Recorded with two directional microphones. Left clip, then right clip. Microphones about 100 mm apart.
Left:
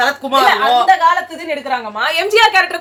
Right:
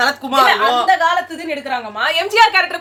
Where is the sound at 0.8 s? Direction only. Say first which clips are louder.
Left 3 dB; 5° left (ahead or behind).